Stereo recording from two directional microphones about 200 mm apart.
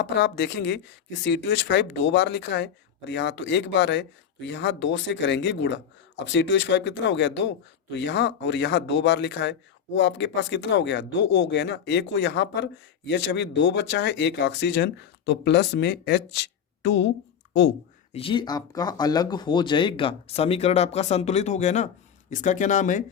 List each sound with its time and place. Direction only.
0.0 s a man's voice: 60° left (ahead or behind)
18.1 s speech: 25° left (ahead or behind)